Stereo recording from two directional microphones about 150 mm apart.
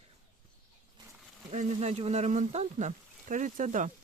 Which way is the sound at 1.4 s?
45° right (ahead or behind).